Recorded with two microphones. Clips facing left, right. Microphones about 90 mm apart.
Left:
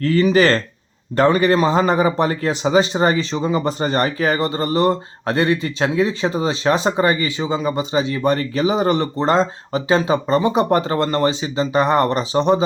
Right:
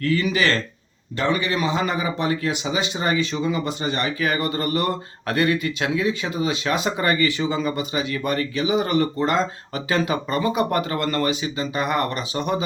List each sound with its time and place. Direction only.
0.0 s speech: 35° left (ahead or behind)